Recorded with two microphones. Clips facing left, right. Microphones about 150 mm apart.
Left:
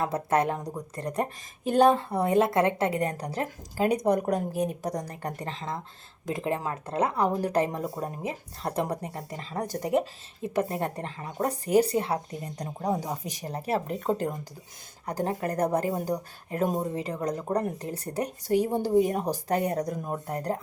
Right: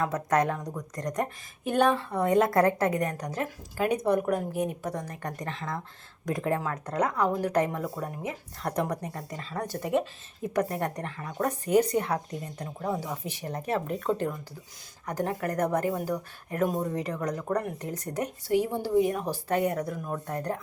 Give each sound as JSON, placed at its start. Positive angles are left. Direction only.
{"t": 0.0, "sound": "speech", "side_deg": 30}
{"t": 9.6, "sound": "speech", "side_deg": 40}
{"t": 10.5, "sound": "speech", "side_deg": 25}